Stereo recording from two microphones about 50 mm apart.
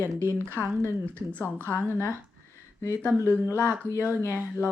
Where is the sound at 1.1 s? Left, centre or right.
Left.